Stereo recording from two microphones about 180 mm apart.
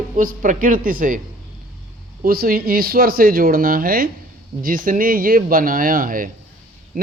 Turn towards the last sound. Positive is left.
turn(degrees=-50)  # may be behind; listen again after turning